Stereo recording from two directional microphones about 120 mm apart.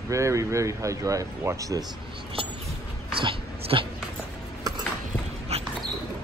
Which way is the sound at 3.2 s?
45° right (ahead or behind).